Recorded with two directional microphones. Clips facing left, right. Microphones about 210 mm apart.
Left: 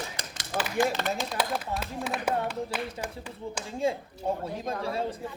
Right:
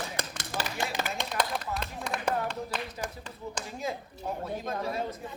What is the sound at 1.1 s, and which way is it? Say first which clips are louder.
Speech: left 2 dB; centre (ahead or behind).